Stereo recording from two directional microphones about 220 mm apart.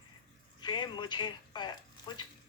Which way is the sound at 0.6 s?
20° left (ahead or behind).